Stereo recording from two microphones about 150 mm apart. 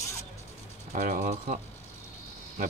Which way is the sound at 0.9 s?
60° right (ahead or behind).